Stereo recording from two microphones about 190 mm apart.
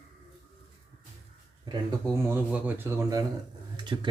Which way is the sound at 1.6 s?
25° right (ahead or behind).